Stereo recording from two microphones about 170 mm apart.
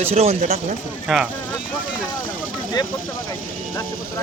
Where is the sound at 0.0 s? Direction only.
35° right (ahead or behind).